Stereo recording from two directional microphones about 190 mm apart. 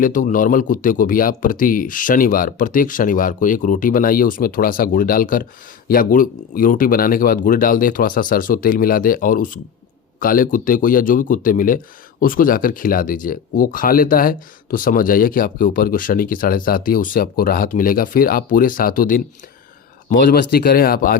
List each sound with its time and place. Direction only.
0.0 s speech: 45° left (ahead or behind)